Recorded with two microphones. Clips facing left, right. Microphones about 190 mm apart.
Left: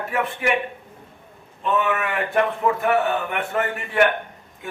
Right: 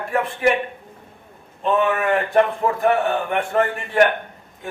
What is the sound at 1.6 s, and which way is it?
A man's voice, 35° right (ahead or behind).